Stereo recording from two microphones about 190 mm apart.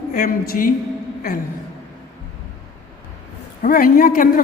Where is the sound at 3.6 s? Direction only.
45° left (ahead or behind).